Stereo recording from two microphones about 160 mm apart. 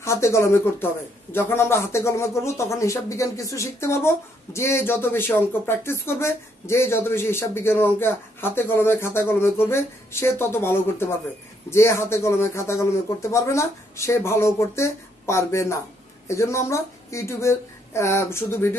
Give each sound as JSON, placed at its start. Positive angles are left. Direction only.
{"t": 0.0, "sound": "speech", "side_deg": 20}